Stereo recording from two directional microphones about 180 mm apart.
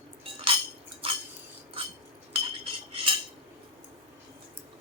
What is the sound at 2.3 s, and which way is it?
Cutlery, 30° right (ahead or behind).